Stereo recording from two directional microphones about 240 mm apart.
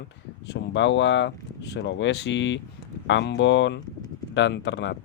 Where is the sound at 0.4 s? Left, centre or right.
Left.